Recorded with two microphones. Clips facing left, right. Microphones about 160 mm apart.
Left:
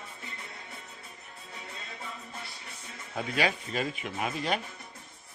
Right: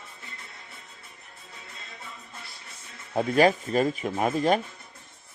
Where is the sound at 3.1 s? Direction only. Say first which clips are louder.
Right 9 dB; 45° right (ahead or behind).